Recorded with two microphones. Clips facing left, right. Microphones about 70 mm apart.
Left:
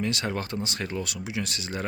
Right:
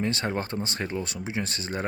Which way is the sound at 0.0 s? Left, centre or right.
Right.